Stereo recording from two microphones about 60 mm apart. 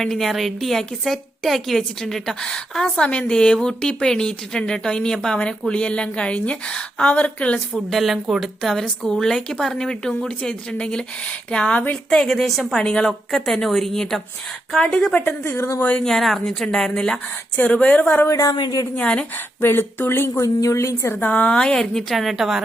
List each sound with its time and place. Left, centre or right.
0.0 s a woman's voice: centre; by 7.6 s left
7.7 s a woman's voice: centre; by 11.9 s left
12.1 s a woman's voice: centre
15.1 s a woman's voice: left
15.4 s a woman's voice: left
15.8 s a woman's voice: left
16.0 s a woman's voice: centre
18.3 s speech: left
18.9 s a woman's voice: centre
19.6 s speech: left
20.4 s a woman's voice: left
21.2 s a woman's voice: left; by 22.6 s centre